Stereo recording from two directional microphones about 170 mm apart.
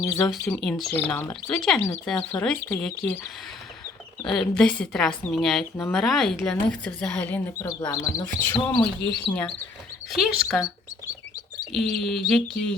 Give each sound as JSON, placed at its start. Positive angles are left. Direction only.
{"t": 0.0, "sound": "a woman's voice", "side_deg": 15}
{"t": 4.3, "sound": "a woman's voice", "side_deg": 5}
{"t": 8.4, "sound": "speech", "side_deg": 10}
{"t": 9.0, "sound": "speech", "side_deg": 85}
{"t": 9.3, "sound": "a woman's voice", "side_deg": 5}